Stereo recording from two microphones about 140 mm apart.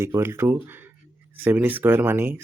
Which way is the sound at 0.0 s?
15° right (ahead or behind).